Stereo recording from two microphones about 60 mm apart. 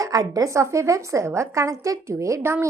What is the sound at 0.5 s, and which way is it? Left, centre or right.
A woman's voice, right.